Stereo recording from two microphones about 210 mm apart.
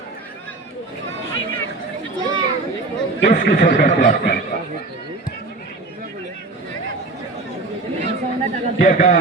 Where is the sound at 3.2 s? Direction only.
40° left (ahead or behind).